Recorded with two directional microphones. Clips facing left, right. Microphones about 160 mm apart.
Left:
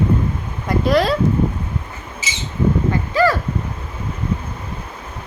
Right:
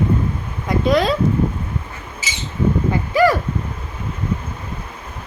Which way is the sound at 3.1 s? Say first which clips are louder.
Right 2 dB; 15° right (ahead or behind).